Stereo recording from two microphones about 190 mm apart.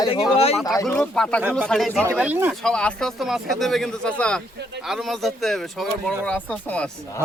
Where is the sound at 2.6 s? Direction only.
5° left (ahead or behind).